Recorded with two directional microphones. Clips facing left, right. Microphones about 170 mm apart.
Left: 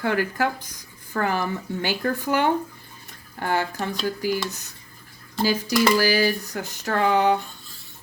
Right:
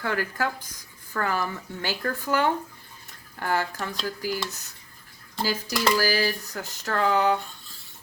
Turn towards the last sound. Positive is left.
turn(degrees=20)  # may be behind; listen again after turning